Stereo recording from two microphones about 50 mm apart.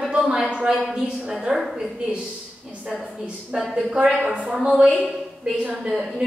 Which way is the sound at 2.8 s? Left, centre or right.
Centre.